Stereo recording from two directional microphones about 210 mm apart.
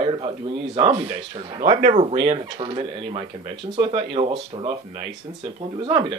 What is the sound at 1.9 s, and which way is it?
Speech, 25° right (ahead or behind).